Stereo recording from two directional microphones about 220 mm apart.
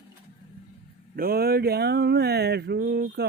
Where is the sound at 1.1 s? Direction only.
45° right (ahead or behind).